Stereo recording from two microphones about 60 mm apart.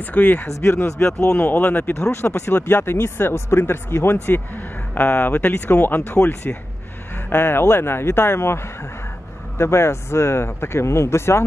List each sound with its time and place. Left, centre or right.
0.0 s speech: left
0.5 s speech: left
1.0 s speech: centre
1.5 s speech: left
2.0 s speech: left
6.1 s speech: left